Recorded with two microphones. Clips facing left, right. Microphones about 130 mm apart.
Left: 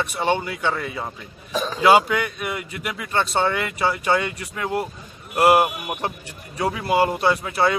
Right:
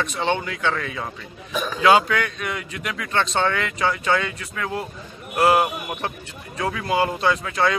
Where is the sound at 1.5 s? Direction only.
35° left (ahead or behind).